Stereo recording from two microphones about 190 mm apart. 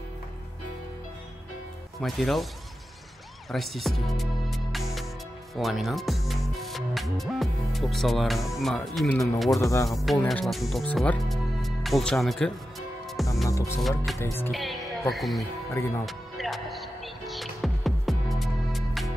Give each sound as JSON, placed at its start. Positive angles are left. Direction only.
{"t": 2.0, "sound": "speech", "side_deg": 0}
{"t": 3.5, "sound": "speech", "side_deg": 0}
{"t": 9.6, "sound": "music", "side_deg": 15}
{"t": 9.8, "sound": "speech", "side_deg": 0}
{"t": 13.5, "sound": "music", "side_deg": 15}
{"t": 13.7, "sound": "speech", "side_deg": 0}
{"t": 14.1, "sound": "music", "side_deg": 15}
{"t": 14.5, "sound": "speech", "side_deg": 0}
{"t": 16.1, "sound": "music", "side_deg": 0}